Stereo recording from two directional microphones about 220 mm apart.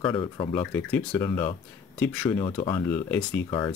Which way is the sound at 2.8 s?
10° left (ahead or behind).